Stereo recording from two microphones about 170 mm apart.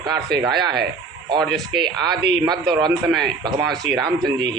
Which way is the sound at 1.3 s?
25° right (ahead or behind).